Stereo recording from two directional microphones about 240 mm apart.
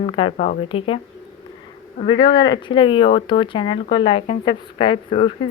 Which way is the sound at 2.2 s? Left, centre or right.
Centre.